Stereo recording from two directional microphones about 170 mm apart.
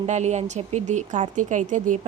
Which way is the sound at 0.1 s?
40° right (ahead or behind).